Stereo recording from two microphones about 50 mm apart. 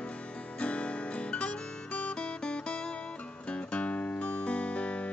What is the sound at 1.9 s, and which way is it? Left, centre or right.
Music, left.